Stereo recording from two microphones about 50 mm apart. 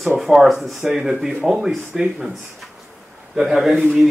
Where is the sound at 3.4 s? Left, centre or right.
Centre.